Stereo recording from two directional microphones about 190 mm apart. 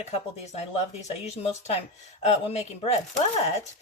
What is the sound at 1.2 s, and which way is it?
Speech, 35° left (ahead or behind).